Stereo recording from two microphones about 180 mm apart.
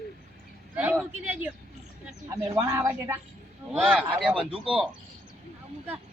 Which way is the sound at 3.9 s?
5° right (ahead or behind).